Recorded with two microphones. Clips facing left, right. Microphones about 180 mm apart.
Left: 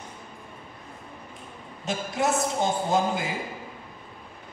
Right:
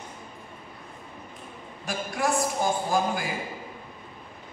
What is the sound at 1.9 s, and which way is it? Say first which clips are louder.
A man's voice: left 1 dB; 20° left (ahead or behind).